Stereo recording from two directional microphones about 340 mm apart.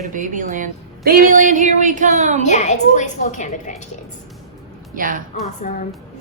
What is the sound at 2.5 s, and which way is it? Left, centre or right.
A woman's voice, left.